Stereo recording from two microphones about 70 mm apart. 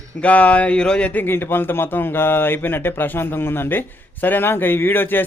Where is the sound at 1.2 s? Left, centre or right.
Left.